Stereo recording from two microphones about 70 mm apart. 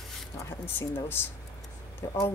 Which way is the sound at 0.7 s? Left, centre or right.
Left.